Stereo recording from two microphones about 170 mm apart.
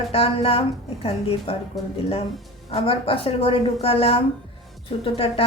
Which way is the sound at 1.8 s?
Centre (ahead or behind).